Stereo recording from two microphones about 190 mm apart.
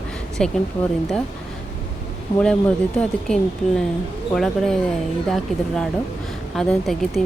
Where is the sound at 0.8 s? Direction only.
30° left (ahead or behind).